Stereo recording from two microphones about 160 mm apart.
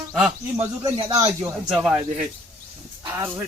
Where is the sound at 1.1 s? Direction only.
20° right (ahead or behind).